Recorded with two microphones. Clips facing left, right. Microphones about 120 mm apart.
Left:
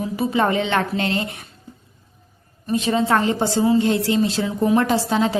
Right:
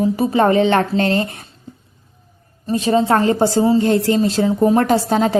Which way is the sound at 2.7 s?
35° right (ahead or behind).